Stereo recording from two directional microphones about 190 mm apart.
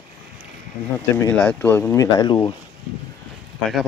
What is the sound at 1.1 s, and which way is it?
Speech, 10° left (ahead or behind).